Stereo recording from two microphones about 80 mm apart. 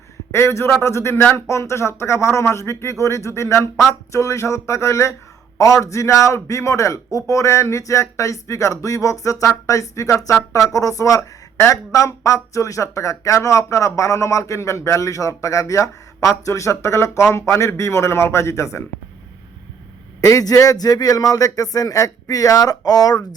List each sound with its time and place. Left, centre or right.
0.3 s a man's voice: left
20.2 s speech: left